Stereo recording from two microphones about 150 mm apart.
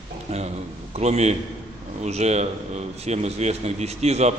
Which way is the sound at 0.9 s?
45° right (ahead or behind).